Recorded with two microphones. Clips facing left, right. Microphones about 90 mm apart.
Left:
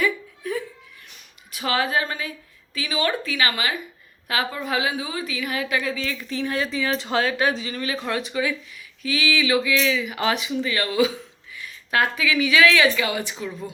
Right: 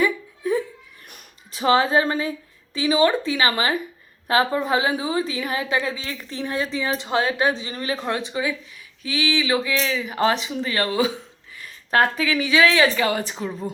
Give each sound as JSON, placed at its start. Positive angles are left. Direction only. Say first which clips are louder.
{"t": 0.0, "sound": "giggle", "louder": "right 3 dB", "side_deg": -25}
{"t": 1.5, "sound": "a woman's voice", "louder": "right 6 dB", "side_deg": -30}